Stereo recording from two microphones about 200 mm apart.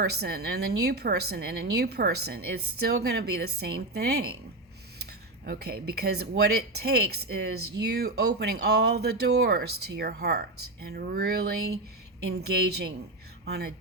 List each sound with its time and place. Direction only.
0.0 s a woman's voice: 55° right (ahead or behind)
5.5 s a woman's voice: 50° right (ahead or behind)